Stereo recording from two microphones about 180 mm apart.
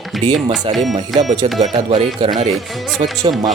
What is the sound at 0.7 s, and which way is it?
Speech, 30° right (ahead or behind).